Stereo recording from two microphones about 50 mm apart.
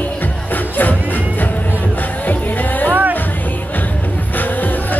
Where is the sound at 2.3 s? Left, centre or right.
Left.